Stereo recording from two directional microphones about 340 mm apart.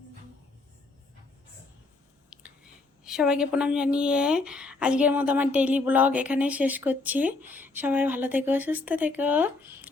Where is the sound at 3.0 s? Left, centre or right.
Centre.